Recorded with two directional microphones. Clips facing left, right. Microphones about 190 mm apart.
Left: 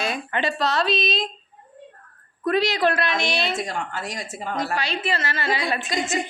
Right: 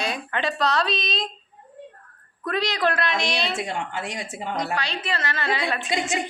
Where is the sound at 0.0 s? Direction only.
Centre (ahead or behind).